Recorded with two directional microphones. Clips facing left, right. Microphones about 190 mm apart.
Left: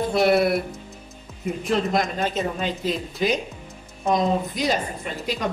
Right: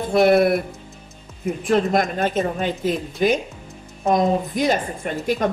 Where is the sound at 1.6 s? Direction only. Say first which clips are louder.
Right 4 dB; 50° right (ahead or behind).